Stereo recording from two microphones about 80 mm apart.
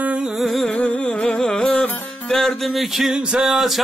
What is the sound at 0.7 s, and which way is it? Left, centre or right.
Music, centre.